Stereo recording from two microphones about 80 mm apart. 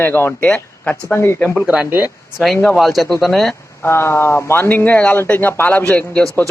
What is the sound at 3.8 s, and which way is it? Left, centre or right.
Speech, left.